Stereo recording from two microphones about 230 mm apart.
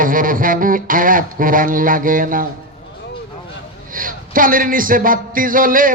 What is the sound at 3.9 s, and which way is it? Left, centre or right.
Speech, right.